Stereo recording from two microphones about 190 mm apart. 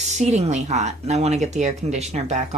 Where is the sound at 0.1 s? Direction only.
35° right (ahead or behind).